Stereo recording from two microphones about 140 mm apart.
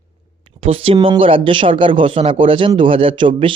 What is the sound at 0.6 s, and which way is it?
Speech, 40° right (ahead or behind).